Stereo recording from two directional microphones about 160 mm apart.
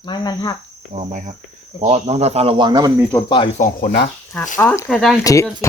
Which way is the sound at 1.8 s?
45° right (ahead or behind).